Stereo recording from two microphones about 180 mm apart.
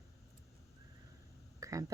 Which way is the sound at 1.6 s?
20° right (ahead or behind).